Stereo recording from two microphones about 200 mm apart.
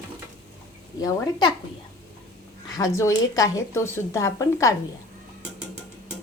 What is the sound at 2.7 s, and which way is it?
A woman's voice, 15° left (ahead or behind).